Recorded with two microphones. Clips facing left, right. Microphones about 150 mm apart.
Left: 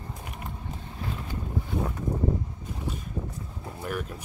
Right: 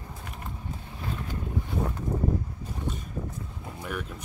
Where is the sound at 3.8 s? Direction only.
5° left (ahead or behind).